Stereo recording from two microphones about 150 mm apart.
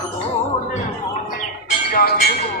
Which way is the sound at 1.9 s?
80° left.